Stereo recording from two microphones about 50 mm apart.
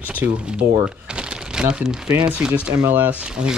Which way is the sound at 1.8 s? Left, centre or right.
Centre.